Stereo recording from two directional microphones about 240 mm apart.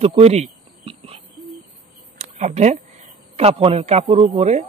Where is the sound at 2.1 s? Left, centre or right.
Right.